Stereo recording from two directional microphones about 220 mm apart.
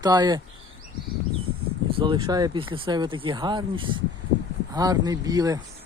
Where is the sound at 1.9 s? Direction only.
20° right (ahead or behind).